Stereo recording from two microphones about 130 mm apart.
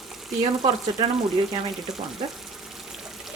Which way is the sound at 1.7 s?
Centre (ahead or behind).